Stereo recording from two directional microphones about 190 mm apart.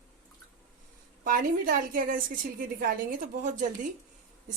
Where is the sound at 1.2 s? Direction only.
50° right (ahead or behind).